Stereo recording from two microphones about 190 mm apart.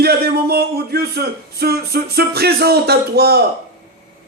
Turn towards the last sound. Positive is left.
turn(degrees=-55)  # may be behind; listen again after turning